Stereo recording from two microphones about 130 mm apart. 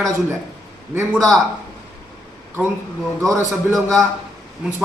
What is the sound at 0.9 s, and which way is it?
Speech, 20° right (ahead or behind).